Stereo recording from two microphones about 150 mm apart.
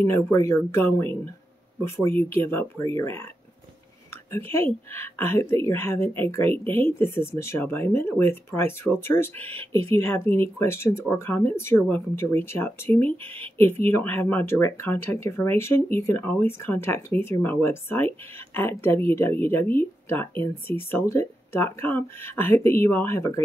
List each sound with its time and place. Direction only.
0.0 s speech: 15° left (ahead or behind)
4.3 s speech: 15° left (ahead or behind)